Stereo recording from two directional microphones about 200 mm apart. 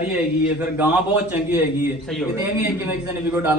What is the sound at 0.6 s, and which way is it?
A man's voice, 10° right (ahead or behind).